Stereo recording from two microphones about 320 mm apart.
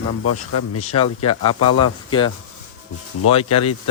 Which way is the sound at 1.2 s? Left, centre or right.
Left.